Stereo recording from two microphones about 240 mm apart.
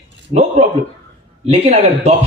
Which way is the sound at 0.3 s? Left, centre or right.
Right.